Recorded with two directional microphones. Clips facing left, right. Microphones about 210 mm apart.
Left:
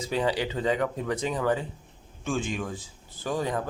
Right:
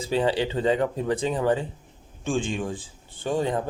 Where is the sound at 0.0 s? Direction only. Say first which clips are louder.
Right 3 dB; 30° right (ahead or behind).